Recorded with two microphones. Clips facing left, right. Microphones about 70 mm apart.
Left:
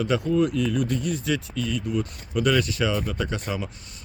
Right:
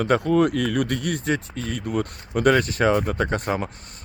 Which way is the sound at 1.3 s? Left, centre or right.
Right.